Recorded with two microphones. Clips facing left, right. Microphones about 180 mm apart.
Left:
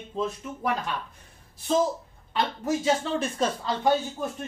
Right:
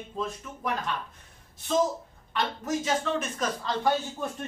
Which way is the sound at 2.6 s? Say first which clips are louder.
Left 3 dB; 30° left (ahead or behind).